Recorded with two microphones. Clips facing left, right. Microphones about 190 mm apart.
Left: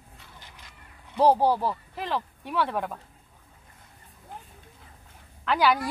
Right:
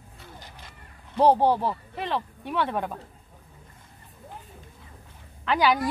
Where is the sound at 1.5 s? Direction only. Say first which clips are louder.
Right 1 dB; 20° right (ahead or behind).